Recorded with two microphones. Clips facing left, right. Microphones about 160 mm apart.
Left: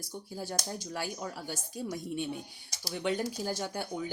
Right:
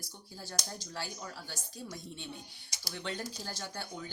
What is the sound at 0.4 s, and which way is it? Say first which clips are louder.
Speech: left 4 dB; 55° left (ahead or behind).